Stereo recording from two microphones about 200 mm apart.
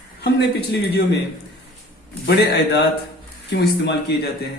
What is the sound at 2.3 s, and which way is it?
Speech, 55° left (ahead or behind).